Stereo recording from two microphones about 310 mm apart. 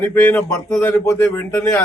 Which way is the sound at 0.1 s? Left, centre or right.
Centre.